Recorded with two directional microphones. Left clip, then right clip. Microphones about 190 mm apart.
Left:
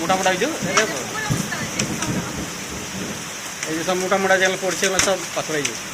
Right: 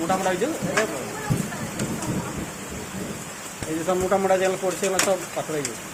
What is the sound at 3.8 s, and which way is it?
Speech, 5° right (ahead or behind).